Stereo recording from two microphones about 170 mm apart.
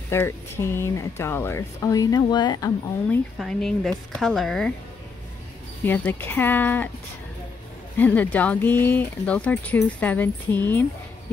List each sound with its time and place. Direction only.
0.1 s speech: 15° left (ahead or behind)
3.3 s speech: centre (ahead or behind)
5.9 s speech: 10° left (ahead or behind)
8.0 s speech: 10° left (ahead or behind)